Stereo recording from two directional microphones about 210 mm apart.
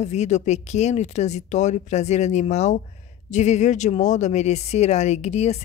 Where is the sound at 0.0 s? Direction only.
30° left (ahead or behind).